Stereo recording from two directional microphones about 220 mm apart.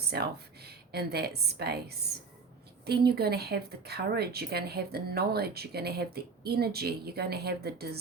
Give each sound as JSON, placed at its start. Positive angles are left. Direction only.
{"t": 0.1, "sound": "a woman's voice", "side_deg": -45}